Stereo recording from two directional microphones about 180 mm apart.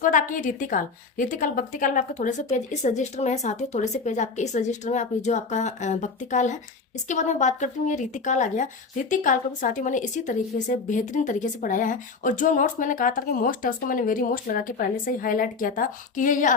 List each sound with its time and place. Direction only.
0.0 s a woman's voice: 45° left (ahead or behind)